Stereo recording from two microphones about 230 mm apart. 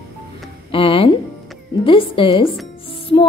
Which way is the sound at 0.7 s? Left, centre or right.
Left.